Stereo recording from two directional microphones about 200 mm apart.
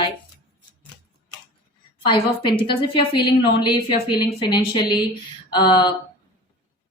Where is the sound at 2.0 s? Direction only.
25° left (ahead or behind).